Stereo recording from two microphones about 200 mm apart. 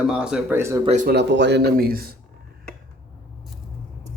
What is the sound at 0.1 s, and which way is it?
Speech, 5° right (ahead or behind).